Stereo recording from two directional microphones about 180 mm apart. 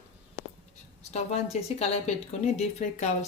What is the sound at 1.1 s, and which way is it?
Speech, 35° left (ahead or behind).